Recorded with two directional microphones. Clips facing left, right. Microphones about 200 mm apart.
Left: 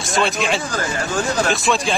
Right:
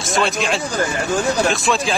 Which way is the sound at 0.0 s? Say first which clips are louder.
Even; centre (ahead or behind).